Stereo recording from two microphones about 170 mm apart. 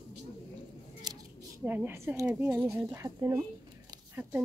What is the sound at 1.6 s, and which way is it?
Speech, 10° right (ahead or behind).